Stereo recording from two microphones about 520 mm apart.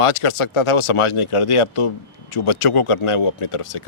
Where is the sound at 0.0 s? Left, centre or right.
Left.